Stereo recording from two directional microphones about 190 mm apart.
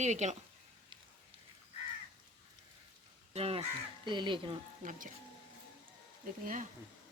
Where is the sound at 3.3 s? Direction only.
30° right (ahead or behind).